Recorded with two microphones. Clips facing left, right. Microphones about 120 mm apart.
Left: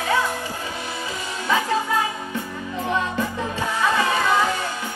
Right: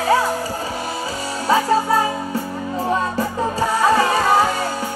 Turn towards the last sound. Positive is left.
turn(degrees=-35)  # may be behind; listen again after turning